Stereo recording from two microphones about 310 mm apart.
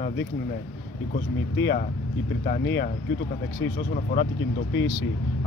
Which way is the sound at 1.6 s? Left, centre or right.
Left.